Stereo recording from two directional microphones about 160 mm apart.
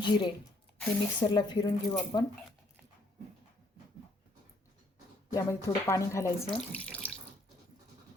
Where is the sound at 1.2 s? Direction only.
25° left (ahead or behind).